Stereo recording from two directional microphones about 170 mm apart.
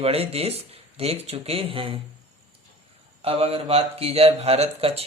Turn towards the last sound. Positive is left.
turn(degrees=-35)  # may be behind; listen again after turning